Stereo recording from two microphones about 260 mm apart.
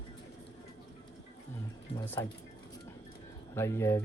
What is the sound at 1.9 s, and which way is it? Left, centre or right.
Speech, centre.